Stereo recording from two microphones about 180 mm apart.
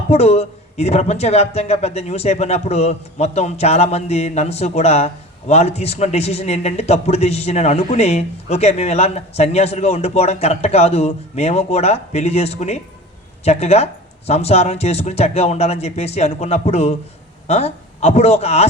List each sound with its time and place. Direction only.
0.1 s speech: 35° left (ahead or behind)